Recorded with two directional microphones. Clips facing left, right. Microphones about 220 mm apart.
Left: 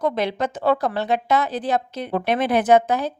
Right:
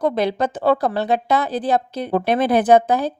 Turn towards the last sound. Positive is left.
turn(degrees=-35)  # may be behind; listen again after turning